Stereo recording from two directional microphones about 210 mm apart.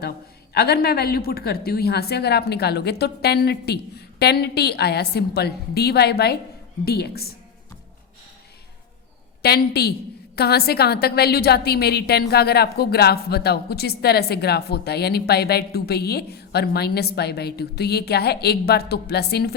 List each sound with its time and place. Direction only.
0.5 s a woman's voice: 50° left (ahead or behind)
9.4 s a woman's voice: 50° left (ahead or behind)